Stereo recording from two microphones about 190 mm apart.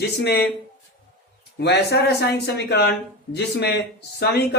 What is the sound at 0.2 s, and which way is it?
Speech, 60° left (ahead or behind).